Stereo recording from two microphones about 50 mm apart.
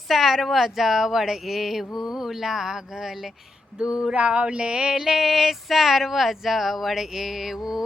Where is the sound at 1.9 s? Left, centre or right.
Centre.